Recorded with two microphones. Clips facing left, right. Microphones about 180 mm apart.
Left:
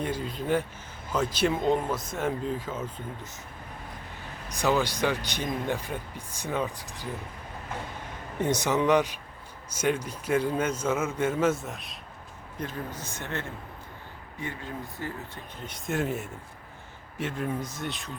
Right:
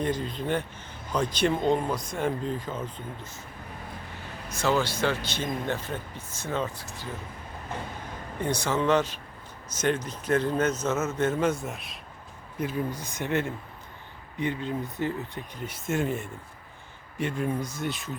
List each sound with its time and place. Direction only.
0.0 s speech: 10° left (ahead or behind)
4.4 s speech: 15° left (ahead or behind)
8.4 s speech: 20° left (ahead or behind); by 15.1 s 20° right (ahead or behind)
15.6 s speech: 5° right (ahead or behind)